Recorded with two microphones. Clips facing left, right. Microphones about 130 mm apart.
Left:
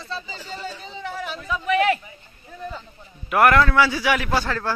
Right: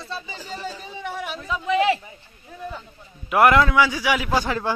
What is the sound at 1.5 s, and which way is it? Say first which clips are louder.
Speech: even; 25° right (ahead or behind).